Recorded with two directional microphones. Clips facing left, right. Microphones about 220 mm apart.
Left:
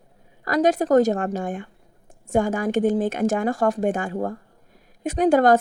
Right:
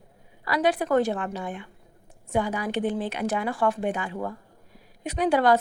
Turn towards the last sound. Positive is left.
turn(degrees=45)  # may be behind; listen again after turning